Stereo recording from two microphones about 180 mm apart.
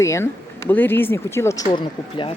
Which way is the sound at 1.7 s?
30° left (ahead or behind).